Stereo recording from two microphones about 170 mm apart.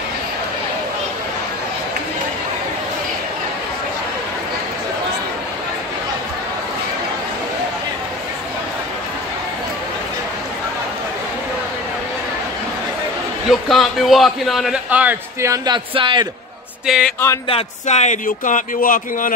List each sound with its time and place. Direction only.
13.5 s a man's voice: centre (ahead or behind)
15.5 s speech: 25° right (ahead or behind)
16.8 s a man's voice: 5° right (ahead or behind)
17.5 s speech: 40° left (ahead or behind); by 19.3 s 55° left (ahead or behind)